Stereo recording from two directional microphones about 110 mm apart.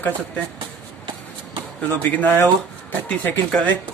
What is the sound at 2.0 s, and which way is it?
A man's voice, 15° left (ahead or behind).